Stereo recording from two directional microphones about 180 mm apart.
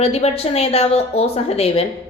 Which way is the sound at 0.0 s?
35° left (ahead or behind).